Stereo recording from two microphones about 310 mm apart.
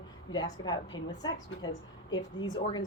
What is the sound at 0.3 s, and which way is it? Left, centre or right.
A woman's voice, centre.